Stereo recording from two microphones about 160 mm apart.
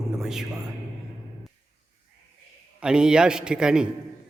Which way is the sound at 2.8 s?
5° right (ahead or behind).